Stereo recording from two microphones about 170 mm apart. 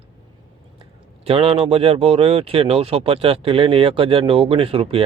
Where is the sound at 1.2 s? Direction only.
35° right (ahead or behind).